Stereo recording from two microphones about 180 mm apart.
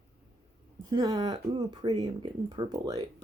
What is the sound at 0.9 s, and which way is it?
Speech, 20° right (ahead or behind).